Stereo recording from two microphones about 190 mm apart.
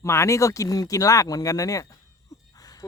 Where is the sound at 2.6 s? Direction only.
20° left (ahead or behind).